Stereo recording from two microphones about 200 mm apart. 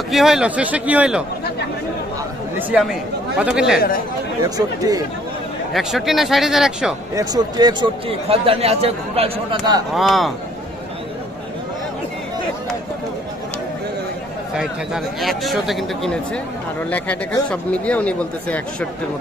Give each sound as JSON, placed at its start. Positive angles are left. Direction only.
{"t": 0.1, "sound": "a man's voice", "side_deg": 0}
{"t": 2.7, "sound": "a man's voice", "side_deg": -5}
{"t": 4.4, "sound": "speech", "side_deg": -20}
{"t": 5.7, "sound": "a man's voice", "side_deg": 0}
{"t": 7.2, "sound": "speech", "side_deg": -20}
{"t": 9.9, "sound": "a man's voice", "side_deg": 0}
{"t": 15.1, "sound": "a man's voice", "side_deg": 0}